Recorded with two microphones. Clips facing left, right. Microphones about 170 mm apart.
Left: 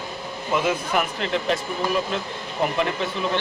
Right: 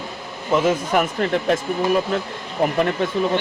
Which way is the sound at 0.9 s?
45° right (ahead or behind).